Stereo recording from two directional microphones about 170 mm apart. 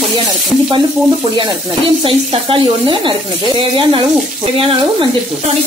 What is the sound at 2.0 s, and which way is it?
Speech, 30° right (ahead or behind).